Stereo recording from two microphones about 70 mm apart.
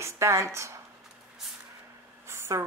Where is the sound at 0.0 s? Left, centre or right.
Right.